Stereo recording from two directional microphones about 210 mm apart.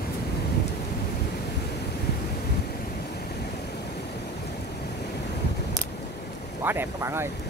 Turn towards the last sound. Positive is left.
turn(degrees=-10)  # may be behind; listen again after turning